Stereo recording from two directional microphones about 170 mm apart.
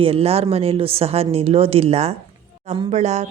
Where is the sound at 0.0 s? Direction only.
35° right (ahead or behind).